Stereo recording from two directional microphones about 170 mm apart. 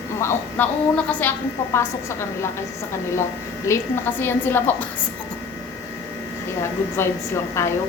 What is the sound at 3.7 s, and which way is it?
A woman's voice, 15° left (ahead or behind).